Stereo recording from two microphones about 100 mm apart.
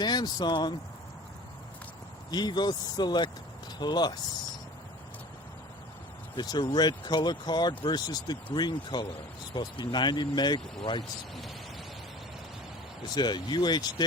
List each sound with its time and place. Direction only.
0.0 s speech: 45° left (ahead or behind)
2.3 s speech: 45° left (ahead or behind)
6.3 s speech: 45° left (ahead or behind)
13.1 s speech: 45° left (ahead or behind)